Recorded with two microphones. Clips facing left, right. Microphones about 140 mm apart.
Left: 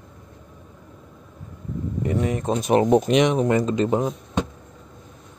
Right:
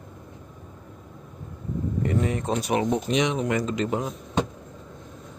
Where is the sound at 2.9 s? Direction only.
60° left (ahead or behind).